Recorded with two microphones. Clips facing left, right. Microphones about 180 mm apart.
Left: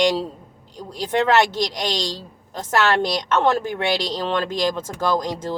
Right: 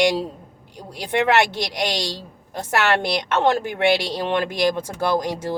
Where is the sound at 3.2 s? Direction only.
15° right (ahead or behind).